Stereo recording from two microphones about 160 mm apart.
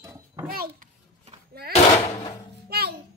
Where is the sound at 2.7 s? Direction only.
80° right.